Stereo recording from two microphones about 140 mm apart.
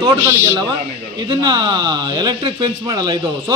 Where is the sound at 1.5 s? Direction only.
30° right (ahead or behind).